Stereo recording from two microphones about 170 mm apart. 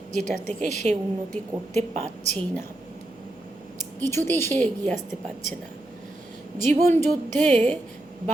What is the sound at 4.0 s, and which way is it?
Speech, 15° left (ahead or behind).